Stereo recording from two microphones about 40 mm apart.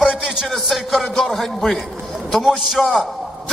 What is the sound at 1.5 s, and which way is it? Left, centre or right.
Speech, centre.